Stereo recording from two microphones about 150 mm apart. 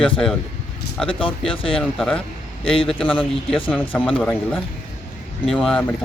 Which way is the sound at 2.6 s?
35° left (ahead or behind).